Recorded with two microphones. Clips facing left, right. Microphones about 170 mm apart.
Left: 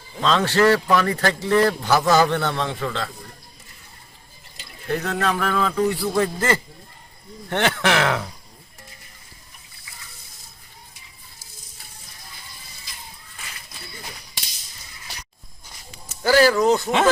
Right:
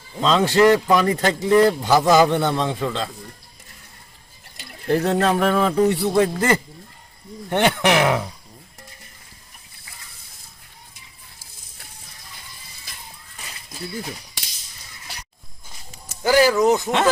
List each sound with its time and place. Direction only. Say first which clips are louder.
0.2 s speech: right 3 dB; 15° right (ahead or behind)
4.9 s a man's voice: right 5 dB; 30° right (ahead or behind); by 8.3 s 15° right (ahead or behind)
16.2 s speech: even; 15° right (ahead or behind)